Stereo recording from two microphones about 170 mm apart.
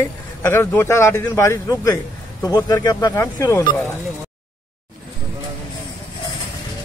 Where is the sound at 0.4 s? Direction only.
15° left (ahead or behind).